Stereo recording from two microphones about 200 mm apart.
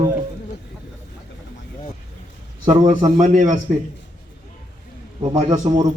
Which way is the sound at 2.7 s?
30° right (ahead or behind).